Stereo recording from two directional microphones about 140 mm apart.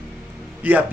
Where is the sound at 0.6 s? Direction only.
10° right (ahead or behind).